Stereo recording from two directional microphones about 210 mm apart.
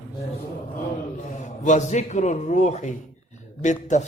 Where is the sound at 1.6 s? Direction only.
35° left (ahead or behind).